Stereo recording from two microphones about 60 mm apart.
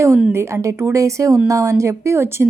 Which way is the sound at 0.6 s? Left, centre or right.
Right.